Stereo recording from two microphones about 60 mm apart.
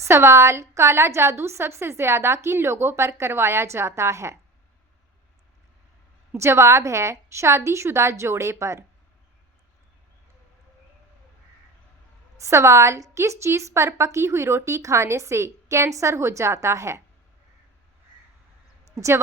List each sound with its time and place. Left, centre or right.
0.1 s a woman's voice: right
6.3 s a woman's voice: right
12.4 s a woman's voice: right
18.9 s a woman's voice: right